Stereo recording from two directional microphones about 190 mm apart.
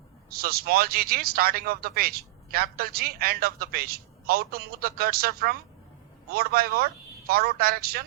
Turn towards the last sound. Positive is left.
turn(degrees=-50)  # may be behind; listen again after turning